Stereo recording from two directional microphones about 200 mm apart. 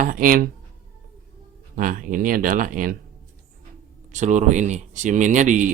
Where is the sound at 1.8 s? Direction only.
45° right (ahead or behind).